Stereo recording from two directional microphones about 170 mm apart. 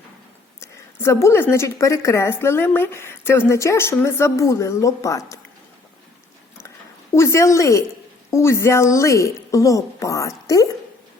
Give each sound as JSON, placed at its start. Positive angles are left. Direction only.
{"t": 0.6, "sound": "a woman's voice", "side_deg": 15}
{"t": 7.1, "sound": "a woman's voice", "side_deg": 15}